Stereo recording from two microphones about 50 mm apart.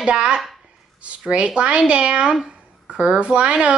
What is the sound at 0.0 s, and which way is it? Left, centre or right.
A child's voice, right.